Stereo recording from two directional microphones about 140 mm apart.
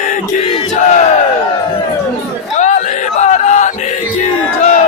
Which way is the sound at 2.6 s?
60° left (ahead or behind).